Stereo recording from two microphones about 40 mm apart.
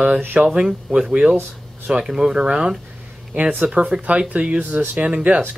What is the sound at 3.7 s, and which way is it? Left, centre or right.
Speech, right.